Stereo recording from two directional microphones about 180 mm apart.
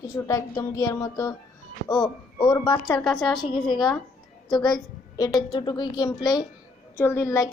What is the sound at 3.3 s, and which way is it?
A woman's voice, 25° left (ahead or behind).